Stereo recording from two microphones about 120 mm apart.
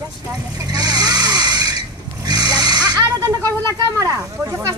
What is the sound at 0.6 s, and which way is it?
Vehicle, 35° right (ahead or behind).